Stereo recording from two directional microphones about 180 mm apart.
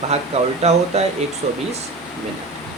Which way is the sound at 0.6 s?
35° right (ahead or behind).